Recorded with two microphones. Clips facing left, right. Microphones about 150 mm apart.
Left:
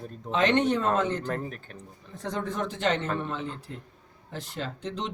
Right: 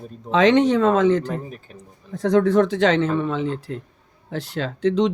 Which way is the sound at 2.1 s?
80° right.